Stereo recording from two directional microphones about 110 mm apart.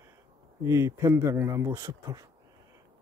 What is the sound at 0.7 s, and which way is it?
A man's voice, 25° right (ahead or behind).